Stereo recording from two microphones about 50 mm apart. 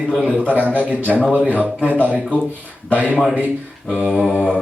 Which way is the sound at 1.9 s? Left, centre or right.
Right.